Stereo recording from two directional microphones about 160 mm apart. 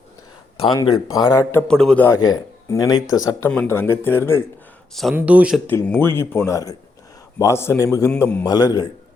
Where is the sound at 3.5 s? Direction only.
10° left (ahead or behind).